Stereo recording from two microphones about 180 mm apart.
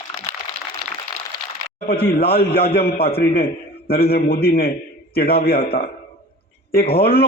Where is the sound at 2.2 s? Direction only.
60° left (ahead or behind).